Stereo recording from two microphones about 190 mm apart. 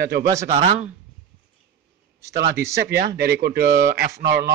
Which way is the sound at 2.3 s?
35° right (ahead or behind).